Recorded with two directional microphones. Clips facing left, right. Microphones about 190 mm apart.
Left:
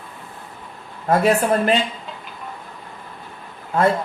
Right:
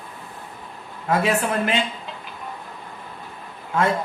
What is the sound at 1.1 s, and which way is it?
Speech, 35° left (ahead or behind).